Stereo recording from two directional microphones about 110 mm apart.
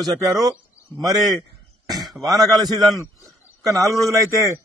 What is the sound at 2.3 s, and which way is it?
Speech, 35° right (ahead or behind).